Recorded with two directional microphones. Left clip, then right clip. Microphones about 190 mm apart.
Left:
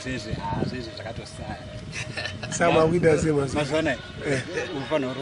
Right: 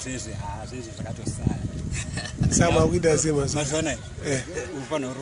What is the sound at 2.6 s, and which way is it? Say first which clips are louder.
Speech: left 2 dB; 10° right (ahead or behind).